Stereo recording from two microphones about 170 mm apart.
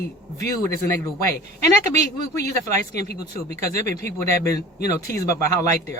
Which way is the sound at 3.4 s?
45° right (ahead or behind).